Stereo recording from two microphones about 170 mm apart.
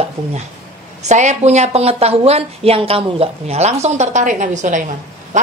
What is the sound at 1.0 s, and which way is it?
A woman's voice, 45° right (ahead or behind).